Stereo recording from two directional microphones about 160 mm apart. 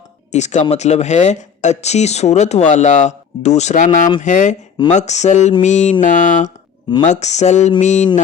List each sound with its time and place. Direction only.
0.3 s speech: 45° left (ahead or behind)